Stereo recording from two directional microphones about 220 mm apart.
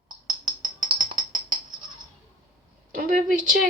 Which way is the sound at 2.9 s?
40° right (ahead or behind).